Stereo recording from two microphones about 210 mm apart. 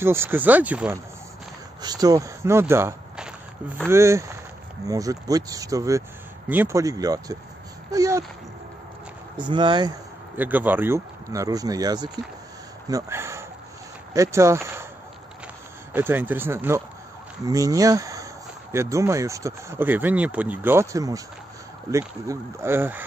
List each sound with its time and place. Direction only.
0.0 s speech: 10° right (ahead or behind)
1.8 s speech: 20° right (ahead or behind)
7.9 s a sound: 15° right (ahead or behind)
9.4 s speech: 20° right (ahead or behind)
10.3 s speech: 10° right (ahead or behind)
12.8 s a sound: 15° right (ahead or behind)
14.1 s speech: 15° right (ahead or behind)
15.9 s speech: 10° right (ahead or behind)